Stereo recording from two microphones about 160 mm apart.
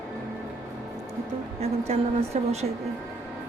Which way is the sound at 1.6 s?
40° right (ahead or behind).